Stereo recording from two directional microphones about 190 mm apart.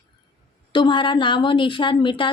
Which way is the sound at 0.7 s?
25° left (ahead or behind).